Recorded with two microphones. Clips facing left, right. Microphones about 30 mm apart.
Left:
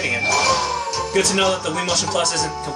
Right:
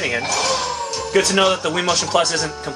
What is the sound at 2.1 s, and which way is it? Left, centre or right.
Speech, centre.